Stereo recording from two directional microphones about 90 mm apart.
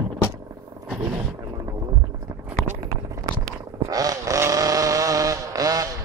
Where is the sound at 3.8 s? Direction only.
45° right (ahead or behind).